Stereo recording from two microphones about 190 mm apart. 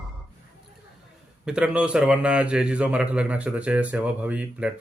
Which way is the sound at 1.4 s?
5° right (ahead or behind).